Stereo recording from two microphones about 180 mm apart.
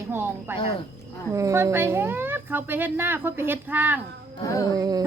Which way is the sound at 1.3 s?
15° right (ahead or behind).